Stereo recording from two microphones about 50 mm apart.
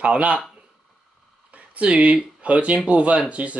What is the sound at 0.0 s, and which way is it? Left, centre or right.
Speech, right.